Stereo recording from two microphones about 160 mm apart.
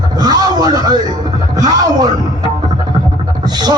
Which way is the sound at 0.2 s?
25° right (ahead or behind).